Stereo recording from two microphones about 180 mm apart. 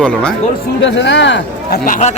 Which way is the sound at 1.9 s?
40° left (ahead or behind).